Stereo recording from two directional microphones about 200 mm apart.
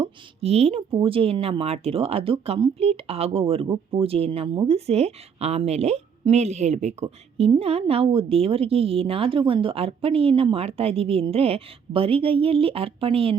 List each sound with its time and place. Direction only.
0.0 s speech: 30° right (ahead or behind)